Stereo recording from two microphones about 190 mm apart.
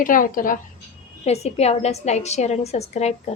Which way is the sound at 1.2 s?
35° left (ahead or behind).